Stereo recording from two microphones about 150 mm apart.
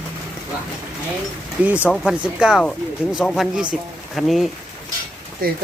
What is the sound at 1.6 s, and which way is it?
Speech, 10° right (ahead or behind).